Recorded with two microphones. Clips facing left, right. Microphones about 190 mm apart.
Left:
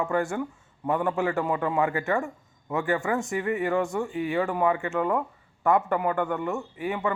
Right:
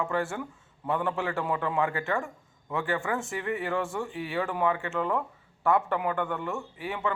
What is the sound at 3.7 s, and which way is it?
Speech, 15° left (ahead or behind).